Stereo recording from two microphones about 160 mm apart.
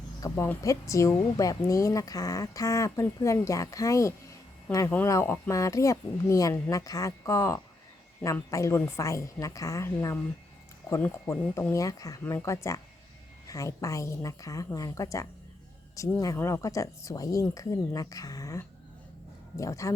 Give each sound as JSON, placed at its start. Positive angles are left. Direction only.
{"t": 0.2, "sound": "a woman's voice", "side_deg": 15}